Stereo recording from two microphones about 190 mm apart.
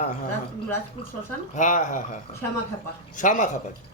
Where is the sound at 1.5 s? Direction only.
40° left (ahead or behind).